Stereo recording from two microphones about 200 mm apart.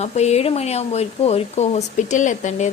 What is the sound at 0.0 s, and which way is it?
Speech, 35° left (ahead or behind).